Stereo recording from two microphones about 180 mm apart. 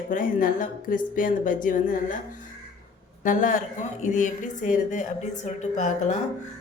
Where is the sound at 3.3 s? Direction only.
50° left (ahead or behind).